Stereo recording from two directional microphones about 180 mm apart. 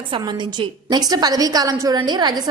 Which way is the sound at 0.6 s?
20° right (ahead or behind).